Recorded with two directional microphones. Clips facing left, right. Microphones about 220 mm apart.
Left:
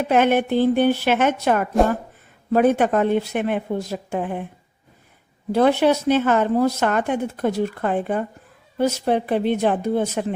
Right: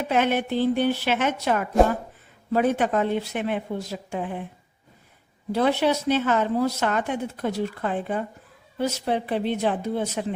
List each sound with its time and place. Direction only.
0.0 s speech: 55° left (ahead or behind)
5.5 s speech: 50° left (ahead or behind)